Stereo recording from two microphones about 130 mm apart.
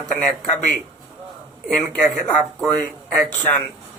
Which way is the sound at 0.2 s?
5° left (ahead or behind).